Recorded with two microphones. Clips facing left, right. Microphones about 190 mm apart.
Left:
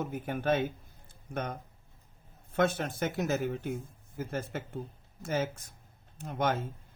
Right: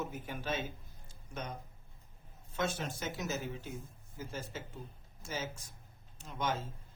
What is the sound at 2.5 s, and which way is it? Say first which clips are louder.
Speech: left 8 dB; 60° left (ahead or behind).